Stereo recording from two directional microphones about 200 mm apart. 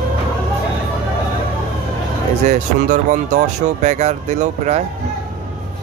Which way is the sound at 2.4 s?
40° right (ahead or behind).